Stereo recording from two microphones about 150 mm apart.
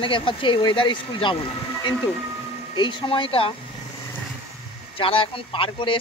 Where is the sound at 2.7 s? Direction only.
35° left (ahead or behind).